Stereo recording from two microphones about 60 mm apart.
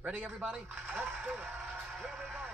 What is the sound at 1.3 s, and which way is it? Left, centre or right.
Speech, right.